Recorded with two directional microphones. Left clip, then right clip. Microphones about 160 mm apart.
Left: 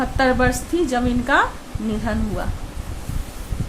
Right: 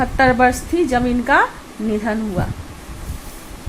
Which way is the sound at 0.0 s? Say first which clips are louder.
Right 5 dB; 35° right (ahead or behind).